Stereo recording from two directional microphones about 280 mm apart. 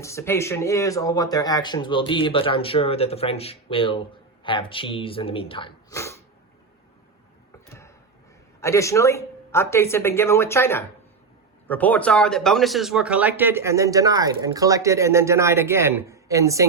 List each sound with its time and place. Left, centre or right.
0.0 s speech: centre
7.7 s a sound: centre
8.6 s speech: centre